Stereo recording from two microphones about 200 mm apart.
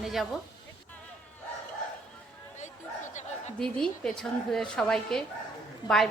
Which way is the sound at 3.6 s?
5° left (ahead or behind).